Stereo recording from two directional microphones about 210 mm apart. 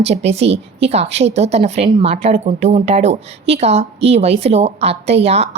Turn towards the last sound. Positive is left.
turn(degrees=-30)  # may be behind; listen again after turning